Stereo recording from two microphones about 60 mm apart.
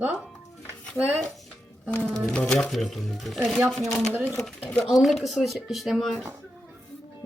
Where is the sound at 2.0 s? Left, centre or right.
Centre.